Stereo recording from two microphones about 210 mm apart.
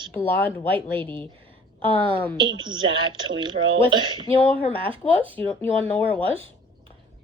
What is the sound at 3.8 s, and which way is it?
Speech, 20° right (ahead or behind).